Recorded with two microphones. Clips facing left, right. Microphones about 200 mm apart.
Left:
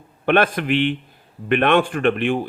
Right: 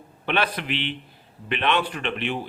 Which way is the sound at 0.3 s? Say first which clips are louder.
Left 8 dB; 50° left (ahead or behind).